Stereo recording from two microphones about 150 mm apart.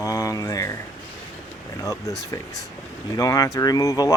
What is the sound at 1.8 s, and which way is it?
Speech, 20° left (ahead or behind).